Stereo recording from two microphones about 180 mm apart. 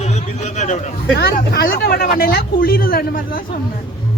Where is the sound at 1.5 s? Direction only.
60° left (ahead or behind).